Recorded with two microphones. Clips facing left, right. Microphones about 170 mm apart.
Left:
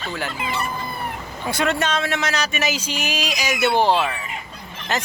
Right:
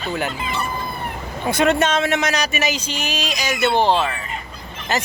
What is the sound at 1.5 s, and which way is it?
Speech, 20° right (ahead or behind).